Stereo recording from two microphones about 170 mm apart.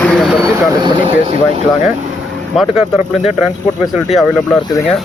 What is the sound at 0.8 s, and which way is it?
Speech, 30° right (ahead or behind).